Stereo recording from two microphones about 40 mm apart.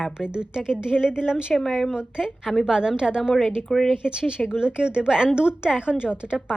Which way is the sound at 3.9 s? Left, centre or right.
Right.